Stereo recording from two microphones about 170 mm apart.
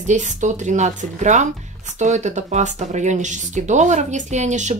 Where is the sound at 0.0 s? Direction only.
45° right (ahead or behind).